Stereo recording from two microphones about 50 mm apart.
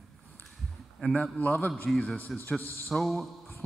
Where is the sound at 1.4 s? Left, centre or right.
Left.